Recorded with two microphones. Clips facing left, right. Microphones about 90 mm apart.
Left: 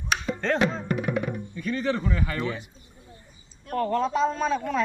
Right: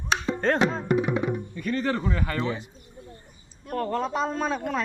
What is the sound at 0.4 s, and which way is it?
Speech, 45° right (ahead or behind).